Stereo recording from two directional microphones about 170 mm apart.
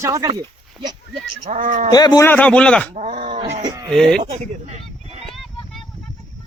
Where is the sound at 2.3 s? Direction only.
5° left (ahead or behind).